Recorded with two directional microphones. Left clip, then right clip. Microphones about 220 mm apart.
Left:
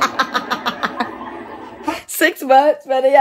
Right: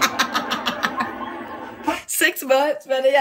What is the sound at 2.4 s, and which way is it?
Speech, 15° left (ahead or behind).